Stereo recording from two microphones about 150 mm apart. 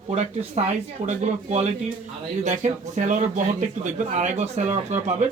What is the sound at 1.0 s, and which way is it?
Speech, 50° right (ahead or behind).